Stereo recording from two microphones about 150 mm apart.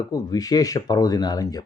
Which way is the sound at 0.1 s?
25° left (ahead or behind).